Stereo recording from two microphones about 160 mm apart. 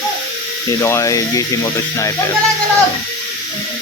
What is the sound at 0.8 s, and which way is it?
A man's voice, 20° left (ahead or behind).